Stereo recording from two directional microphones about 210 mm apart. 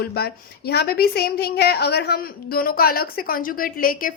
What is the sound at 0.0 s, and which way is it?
A woman's voice, 50° left (ahead or behind).